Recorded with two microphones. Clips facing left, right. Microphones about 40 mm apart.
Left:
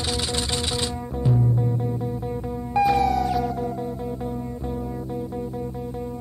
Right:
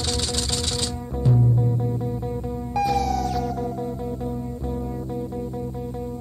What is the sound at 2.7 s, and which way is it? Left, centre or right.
Music, left.